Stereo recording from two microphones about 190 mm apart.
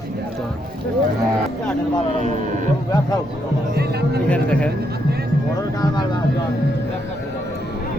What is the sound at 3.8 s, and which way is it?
Speech, 55° right (ahead or behind).